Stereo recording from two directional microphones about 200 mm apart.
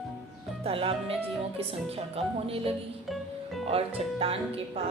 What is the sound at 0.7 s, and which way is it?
Speech, 30° right (ahead or behind).